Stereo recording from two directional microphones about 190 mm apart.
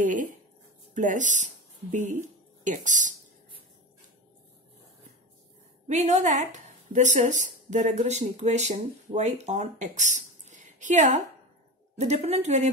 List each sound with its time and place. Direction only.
0.9 s speech: 40° right (ahead or behind)
5.9 s a woman's voice: 40° right (ahead or behind)